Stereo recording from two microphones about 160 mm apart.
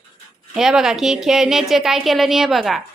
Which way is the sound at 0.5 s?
5° right (ahead or behind).